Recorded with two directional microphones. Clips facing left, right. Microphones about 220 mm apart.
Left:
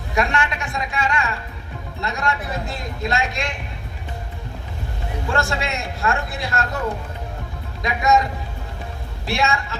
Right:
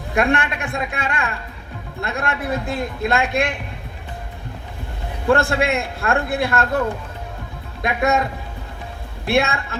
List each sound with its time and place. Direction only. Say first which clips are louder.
0.1 s a woman's voice: right 3 dB; 55° right (ahead or behind)
5.3 s a woman's voice: right 7 dB; 55° right (ahead or behind)
9.2 s a woman's voice: right 3 dB; 55° right (ahead or behind)